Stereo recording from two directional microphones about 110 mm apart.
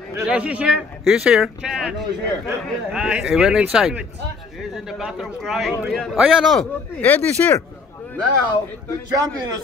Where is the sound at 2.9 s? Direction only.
10° right (ahead or behind).